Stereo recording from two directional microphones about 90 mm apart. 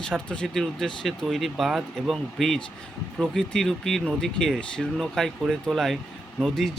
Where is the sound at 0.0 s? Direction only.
10° left (ahead or behind).